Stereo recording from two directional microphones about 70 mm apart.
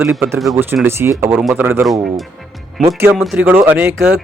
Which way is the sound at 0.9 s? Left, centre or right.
Right.